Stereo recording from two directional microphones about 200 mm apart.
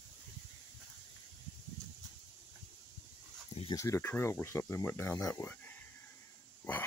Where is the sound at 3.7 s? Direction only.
15° left (ahead or behind).